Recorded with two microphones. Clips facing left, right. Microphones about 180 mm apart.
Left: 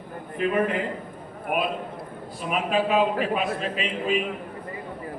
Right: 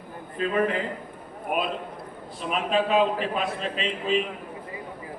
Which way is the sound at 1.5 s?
5° left (ahead or behind).